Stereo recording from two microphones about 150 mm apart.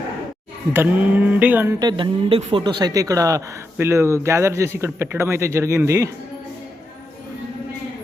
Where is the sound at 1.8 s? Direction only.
35° right (ahead or behind).